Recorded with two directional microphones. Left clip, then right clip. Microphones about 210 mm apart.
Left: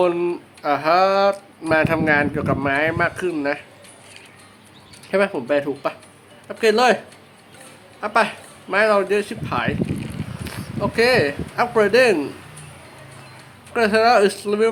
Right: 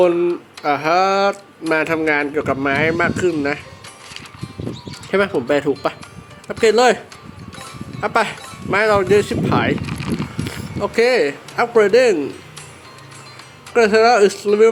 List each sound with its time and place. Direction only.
0.0 s speech: centre (ahead or behind)
5.1 s speech: 20° right (ahead or behind)
8.0 s speech: 20° right (ahead or behind)
9.8 s a sound: centre (ahead or behind)
10.4 s speech: 15° right (ahead or behind)
13.7 s speech: 10° right (ahead or behind)